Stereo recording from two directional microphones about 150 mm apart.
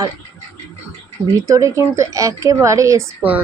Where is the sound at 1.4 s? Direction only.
20° right (ahead or behind).